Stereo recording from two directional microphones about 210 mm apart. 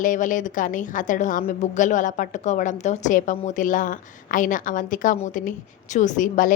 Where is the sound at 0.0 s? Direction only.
40° left (ahead or behind).